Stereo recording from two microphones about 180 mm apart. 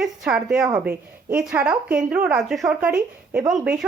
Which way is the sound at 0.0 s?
5° right (ahead or behind).